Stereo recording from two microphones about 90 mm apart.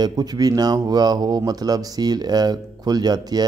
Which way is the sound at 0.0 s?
45° right (ahead or behind).